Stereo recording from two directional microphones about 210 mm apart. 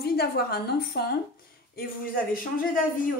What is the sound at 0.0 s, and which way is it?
A woman's voice, 50° left (ahead or behind).